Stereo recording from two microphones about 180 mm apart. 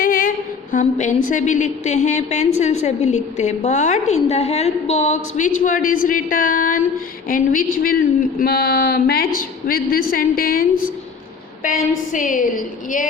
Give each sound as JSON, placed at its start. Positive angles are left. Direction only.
{"t": 0.0, "sound": "a woman's voice", "side_deg": 50}